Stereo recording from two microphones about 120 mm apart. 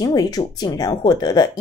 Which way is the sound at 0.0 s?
30° left (ahead or behind).